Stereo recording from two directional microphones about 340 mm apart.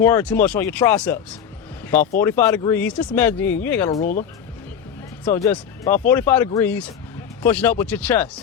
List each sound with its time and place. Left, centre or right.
0.0 s speech: centre
2.2 s speech: centre
4.0 s speech: left
5.2 s speech: centre